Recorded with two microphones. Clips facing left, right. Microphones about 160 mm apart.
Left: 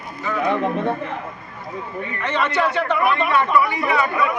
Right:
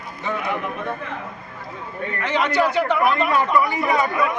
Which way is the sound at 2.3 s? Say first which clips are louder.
Right 1 dB; 10° right (ahead or behind).